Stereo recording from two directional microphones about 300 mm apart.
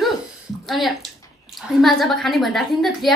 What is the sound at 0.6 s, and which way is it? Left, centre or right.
A woman's voice, centre.